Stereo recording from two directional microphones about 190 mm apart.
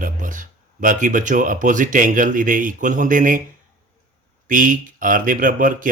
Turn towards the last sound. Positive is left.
turn(degrees=-45)  # may be behind; listen again after turning